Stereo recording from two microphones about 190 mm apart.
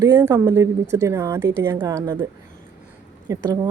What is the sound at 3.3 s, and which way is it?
Speech, 20° right (ahead or behind).